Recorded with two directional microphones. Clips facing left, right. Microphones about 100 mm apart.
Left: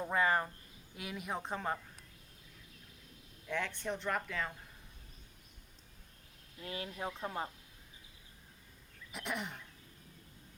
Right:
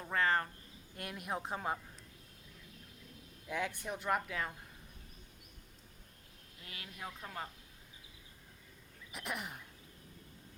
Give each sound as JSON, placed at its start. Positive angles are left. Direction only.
{"t": 0.0, "sound": "a sound", "side_deg": 15}
{"t": 0.9, "sound": "speech", "side_deg": 0}
{"t": 3.5, "sound": "speech", "side_deg": -10}
{"t": 6.6, "sound": "speech", "side_deg": 30}
{"t": 9.1, "sound": "speech", "side_deg": 0}